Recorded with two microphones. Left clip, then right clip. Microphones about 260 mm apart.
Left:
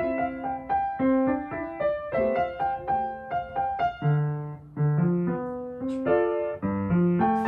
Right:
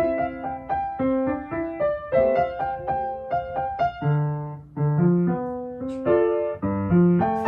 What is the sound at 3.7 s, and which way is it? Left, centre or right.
Music, centre.